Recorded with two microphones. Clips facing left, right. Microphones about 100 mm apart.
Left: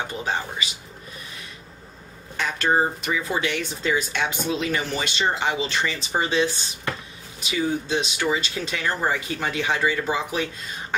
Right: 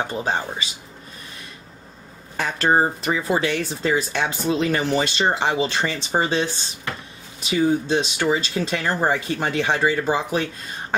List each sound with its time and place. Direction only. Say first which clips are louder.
0.1 s speech: right 3 dB; 35° right (ahead or behind)
2.3 s speech: right 3 dB; 35° right (ahead or behind)